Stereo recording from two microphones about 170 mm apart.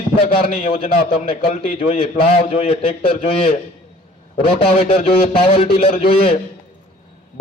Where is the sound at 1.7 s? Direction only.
50° left (ahead or behind).